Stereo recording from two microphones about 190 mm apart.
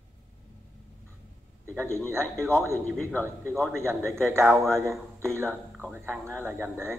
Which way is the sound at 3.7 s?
15° right (ahead or behind).